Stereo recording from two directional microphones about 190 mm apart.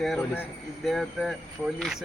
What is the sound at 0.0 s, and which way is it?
Speech, centre (ahead or behind).